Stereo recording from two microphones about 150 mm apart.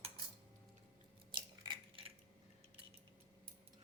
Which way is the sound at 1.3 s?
35° right (ahead or behind).